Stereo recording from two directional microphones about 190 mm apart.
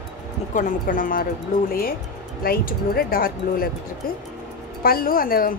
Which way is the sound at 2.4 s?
50° left (ahead or behind).